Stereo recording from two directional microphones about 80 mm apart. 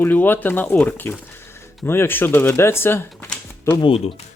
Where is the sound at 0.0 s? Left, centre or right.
Left.